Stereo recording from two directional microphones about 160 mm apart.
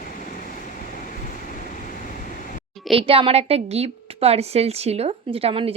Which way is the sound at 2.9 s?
35° right (ahead or behind).